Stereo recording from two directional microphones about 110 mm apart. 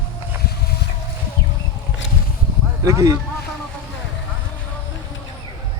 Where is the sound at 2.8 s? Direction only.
30° right (ahead or behind).